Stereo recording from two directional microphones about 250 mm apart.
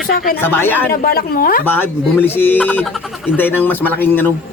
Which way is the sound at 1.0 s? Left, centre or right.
Left.